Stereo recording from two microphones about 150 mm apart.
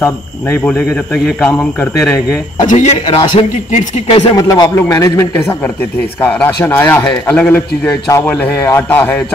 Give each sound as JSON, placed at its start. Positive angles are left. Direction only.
{"t": 0.0, "sound": "a man's voice", "side_deg": 15}
{"t": 2.6, "sound": "speech", "side_deg": 55}
{"t": 4.4, "sound": "a man's voice", "side_deg": 25}
{"t": 5.6, "sound": "a man's voice", "side_deg": 10}